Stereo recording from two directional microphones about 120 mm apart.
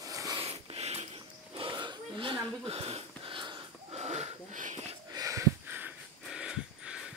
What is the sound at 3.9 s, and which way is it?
Wheeze, 60° right (ahead or behind).